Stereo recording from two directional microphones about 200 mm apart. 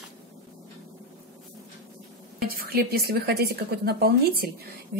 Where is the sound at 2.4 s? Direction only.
50° right (ahead or behind).